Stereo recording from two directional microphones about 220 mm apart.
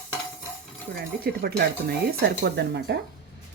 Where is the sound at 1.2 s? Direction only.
45° right (ahead or behind).